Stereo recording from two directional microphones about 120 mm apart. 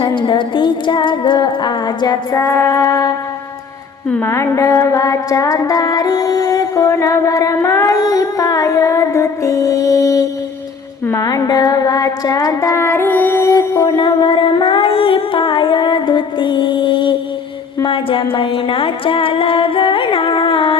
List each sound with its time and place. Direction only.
0.0 s music: 40° left (ahead or behind)
2.4 s music: 20° left (ahead or behind)
11.0 s a sound: 25° left (ahead or behind); by 18.3 s 45° left (ahead or behind)
18.3 s carnatic music: 50° left (ahead or behind)